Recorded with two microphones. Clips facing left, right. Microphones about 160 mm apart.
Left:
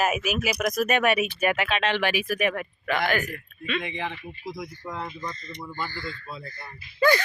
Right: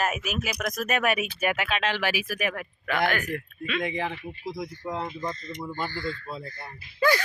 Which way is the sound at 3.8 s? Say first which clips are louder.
Right 3 dB; 35° right (ahead or behind).